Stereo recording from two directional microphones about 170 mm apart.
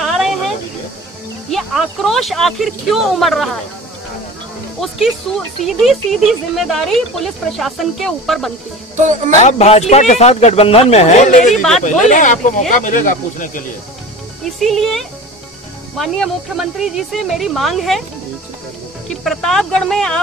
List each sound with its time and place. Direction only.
0.0 s a sound: centre (ahead or behind)
1.5 s speech: centre (ahead or behind)
4.7 s speech: centre (ahead or behind)
9.4 s speech: 40° left (ahead or behind)
11.5 s speech: centre (ahead or behind)
11.8 s speech: 50° left (ahead or behind)
14.4 s speech: centre (ahead or behind)
19.2 s speech: centre (ahead or behind)